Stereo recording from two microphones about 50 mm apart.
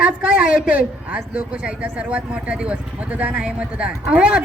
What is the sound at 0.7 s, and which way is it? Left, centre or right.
Speech, right.